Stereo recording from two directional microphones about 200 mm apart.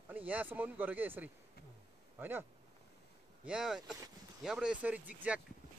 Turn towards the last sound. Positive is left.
turn(degrees=-5)  # may be behind; listen again after turning